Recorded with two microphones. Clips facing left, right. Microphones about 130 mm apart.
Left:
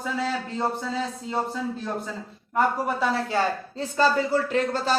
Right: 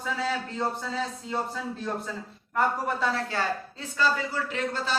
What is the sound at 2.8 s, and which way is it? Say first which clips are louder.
Speech: left 3 dB; 15° left (ahead or behind).